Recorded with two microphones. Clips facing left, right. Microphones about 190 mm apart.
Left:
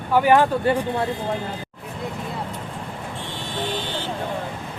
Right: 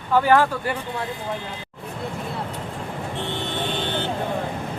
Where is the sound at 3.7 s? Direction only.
60° right (ahead or behind).